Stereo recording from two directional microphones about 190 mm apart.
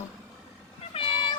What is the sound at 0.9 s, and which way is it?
Vehicle, 25° left (ahead or behind).